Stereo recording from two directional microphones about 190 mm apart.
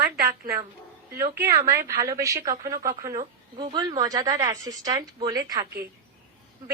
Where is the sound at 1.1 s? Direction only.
15° right (ahead or behind).